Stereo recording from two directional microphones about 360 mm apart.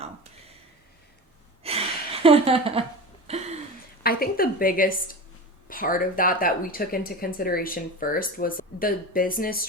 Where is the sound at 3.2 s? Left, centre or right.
Centre.